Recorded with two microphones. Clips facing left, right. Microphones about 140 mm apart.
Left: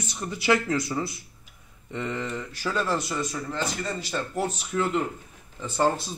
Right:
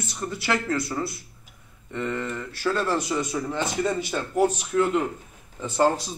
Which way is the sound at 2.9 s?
15° right (ahead or behind).